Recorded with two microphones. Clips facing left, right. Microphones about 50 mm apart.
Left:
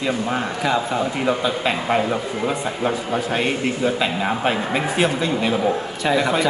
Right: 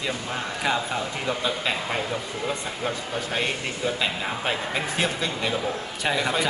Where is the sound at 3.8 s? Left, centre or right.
Centre.